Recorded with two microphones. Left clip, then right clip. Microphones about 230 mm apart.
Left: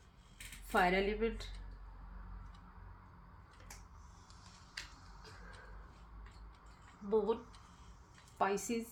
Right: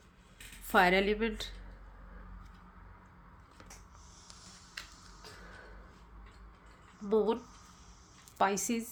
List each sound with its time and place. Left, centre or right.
0.7 s a woman's voice: right
7.0 s a woman's voice: right